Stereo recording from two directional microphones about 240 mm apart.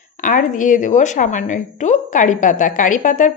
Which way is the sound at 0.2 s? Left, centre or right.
Left.